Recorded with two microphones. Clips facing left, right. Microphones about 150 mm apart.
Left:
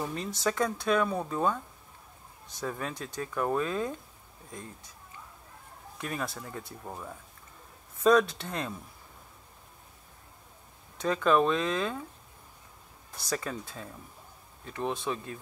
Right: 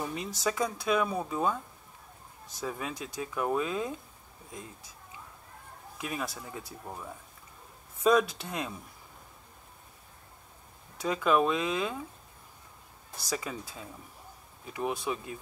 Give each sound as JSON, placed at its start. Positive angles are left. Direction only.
{"t": 0.0, "sound": "speech", "side_deg": -5}
{"t": 2.6, "sound": "speech", "side_deg": -5}
{"t": 5.9, "sound": "speech", "side_deg": -5}
{"t": 11.0, "sound": "speech", "side_deg": -5}
{"t": 13.3, "sound": "speech", "side_deg": -5}